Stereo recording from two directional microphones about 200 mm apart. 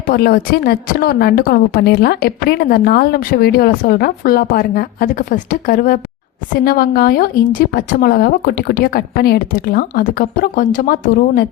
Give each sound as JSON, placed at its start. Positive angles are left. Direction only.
{"t": 0.1, "sound": "a woman's voice", "side_deg": 50}